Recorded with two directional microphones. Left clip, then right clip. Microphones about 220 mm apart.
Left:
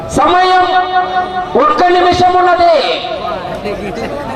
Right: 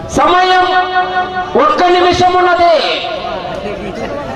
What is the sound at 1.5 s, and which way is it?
A man's voice, 10° left (ahead or behind).